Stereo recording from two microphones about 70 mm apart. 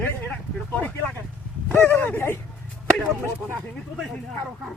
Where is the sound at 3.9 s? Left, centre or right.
Centre.